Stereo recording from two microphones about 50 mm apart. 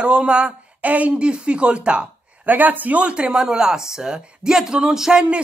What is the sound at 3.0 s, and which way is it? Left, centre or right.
Speech, right.